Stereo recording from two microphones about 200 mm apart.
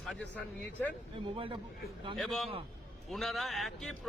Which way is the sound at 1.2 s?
25° right (ahead or behind).